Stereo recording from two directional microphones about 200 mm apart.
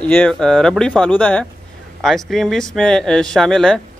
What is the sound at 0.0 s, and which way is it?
Speech, 5° left (ahead or behind).